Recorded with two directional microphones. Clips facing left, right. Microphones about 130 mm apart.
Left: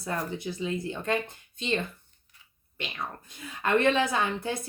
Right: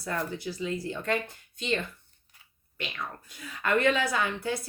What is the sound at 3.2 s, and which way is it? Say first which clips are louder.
Speech: even; 25° left (ahead or behind).